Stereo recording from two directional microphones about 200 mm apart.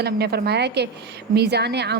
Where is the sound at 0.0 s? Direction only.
55° right (ahead or behind).